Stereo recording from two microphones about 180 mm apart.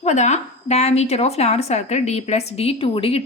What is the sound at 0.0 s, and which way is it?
A woman's voice, 40° left (ahead or behind).